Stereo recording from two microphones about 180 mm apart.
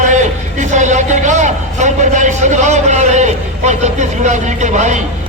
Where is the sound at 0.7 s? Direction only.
40° right (ahead or behind).